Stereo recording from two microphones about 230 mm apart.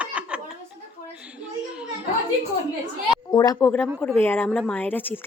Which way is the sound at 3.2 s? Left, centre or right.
Centre.